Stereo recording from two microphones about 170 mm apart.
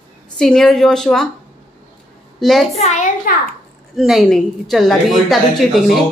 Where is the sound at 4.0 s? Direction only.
Centre (ahead or behind).